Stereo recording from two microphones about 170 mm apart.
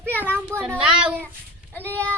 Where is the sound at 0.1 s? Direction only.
10° left (ahead or behind).